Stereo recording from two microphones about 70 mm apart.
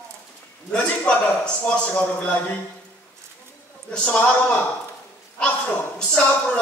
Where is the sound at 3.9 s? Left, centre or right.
Centre.